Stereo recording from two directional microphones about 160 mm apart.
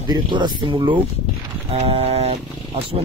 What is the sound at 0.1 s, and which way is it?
Speech, 30° right (ahead or behind).